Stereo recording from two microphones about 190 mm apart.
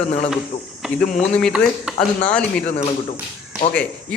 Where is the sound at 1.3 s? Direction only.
Centre (ahead or behind).